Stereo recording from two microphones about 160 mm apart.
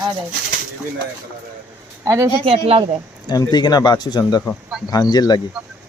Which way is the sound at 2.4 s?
35° right (ahead or behind).